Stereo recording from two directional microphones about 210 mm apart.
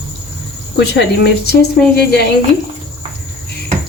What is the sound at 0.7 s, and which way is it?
Speech, 55° left (ahead or behind).